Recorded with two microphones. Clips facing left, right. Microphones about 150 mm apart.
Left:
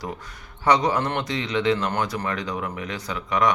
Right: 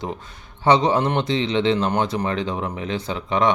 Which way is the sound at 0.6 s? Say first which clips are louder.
Right 3 dB; 25° right (ahead or behind).